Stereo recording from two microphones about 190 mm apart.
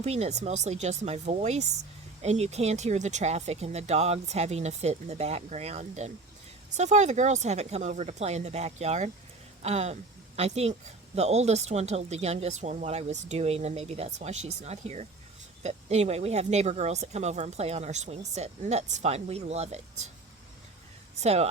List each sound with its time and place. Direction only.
0.0 s speech: 35° right (ahead or behind)
21.2 s speech: 35° right (ahead or behind)